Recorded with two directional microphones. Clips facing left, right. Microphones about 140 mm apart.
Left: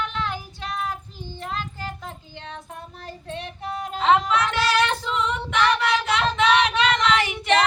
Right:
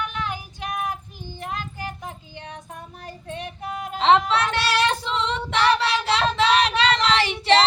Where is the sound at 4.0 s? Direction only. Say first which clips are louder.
Right 1 dB; 25° right (ahead or behind).